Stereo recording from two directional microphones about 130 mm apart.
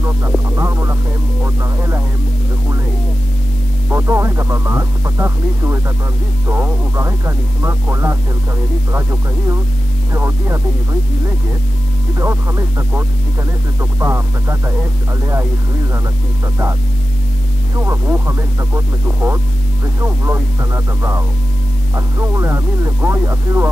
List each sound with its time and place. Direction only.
0.6 s music: 20° right (ahead or behind)
1.4 s speech: 20° right (ahead or behind)
3.9 s speech: 20° right (ahead or behind)
17.7 s speech: 20° right (ahead or behind)